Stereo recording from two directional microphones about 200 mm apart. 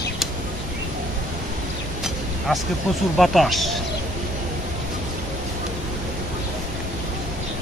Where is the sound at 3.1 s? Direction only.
Centre (ahead or behind).